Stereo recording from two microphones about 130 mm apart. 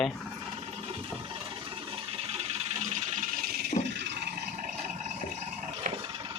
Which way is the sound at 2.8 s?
80° right.